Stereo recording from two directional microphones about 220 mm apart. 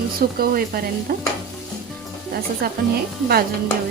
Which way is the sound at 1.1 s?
40° right (ahead or behind).